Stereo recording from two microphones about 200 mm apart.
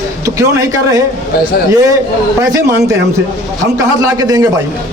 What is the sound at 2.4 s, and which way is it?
Speech, 15° right (ahead or behind).